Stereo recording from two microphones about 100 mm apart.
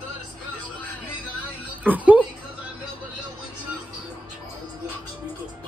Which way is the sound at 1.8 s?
15° right (ahead or behind).